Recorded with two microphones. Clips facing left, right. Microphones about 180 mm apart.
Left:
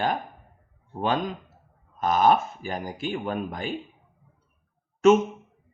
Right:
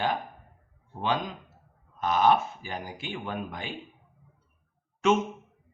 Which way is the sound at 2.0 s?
40° left (ahead or behind).